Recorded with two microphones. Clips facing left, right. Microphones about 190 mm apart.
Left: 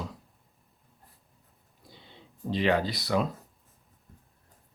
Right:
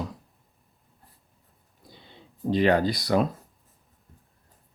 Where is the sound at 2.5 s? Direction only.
45° right (ahead or behind).